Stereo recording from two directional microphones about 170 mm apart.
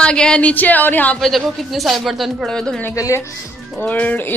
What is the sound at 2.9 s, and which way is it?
Speech, 20° left (ahead or behind).